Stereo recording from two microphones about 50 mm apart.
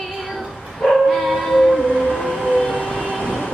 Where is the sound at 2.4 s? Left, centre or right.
Left.